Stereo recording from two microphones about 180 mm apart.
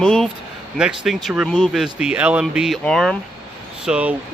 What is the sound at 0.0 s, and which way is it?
Speech, 5° left (ahead or behind).